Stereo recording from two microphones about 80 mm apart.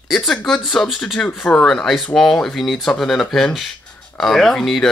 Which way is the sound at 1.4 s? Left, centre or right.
Centre.